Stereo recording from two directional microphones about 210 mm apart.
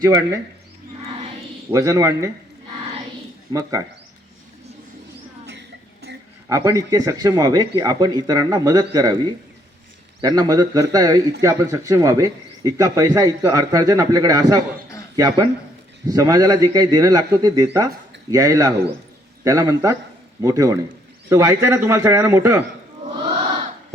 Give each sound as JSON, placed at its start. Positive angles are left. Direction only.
{"t": 0.0, "sound": "a man's voice", "side_deg": -15}
{"t": 1.7, "sound": "a man's voice", "side_deg": -15}
{"t": 3.5, "sound": "a man's voice", "side_deg": -15}
{"t": 5.5, "sound": "music", "side_deg": -55}
{"t": 6.5, "sound": "a man's voice", "side_deg": -15}
{"t": 10.2, "sound": "a man's voice", "side_deg": -20}